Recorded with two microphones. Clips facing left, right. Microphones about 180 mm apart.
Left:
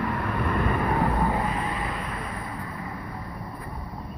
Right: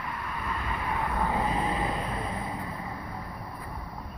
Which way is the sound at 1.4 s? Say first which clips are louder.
Right 1 dB; 20° right (ahead or behind).